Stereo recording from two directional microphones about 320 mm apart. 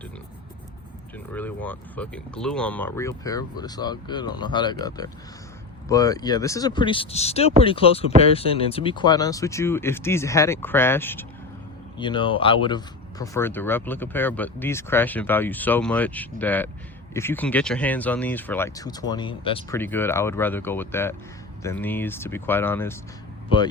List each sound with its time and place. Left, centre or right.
1.3 s speech: centre